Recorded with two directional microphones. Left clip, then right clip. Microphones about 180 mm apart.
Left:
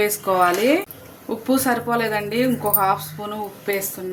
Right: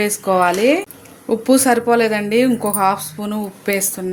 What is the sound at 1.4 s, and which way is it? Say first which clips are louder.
A woman's voice: right 6 dB; 40° right (ahead or behind).